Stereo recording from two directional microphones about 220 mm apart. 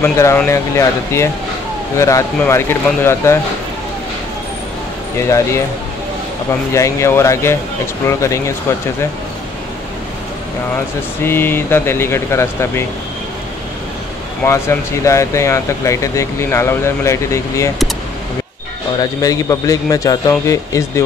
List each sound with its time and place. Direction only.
0.0 s speech: 10° left (ahead or behind)
6.7 s speech: 15° left (ahead or behind)
11.2 s speech: 10° left (ahead or behind)
14.4 s speech: 10° left (ahead or behind)
19.2 s speech: 15° left (ahead or behind)